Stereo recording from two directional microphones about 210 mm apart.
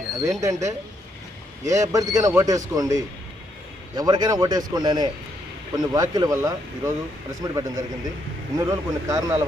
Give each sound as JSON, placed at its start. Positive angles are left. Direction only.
{"t": 0.2, "sound": "a man's voice", "side_deg": -15}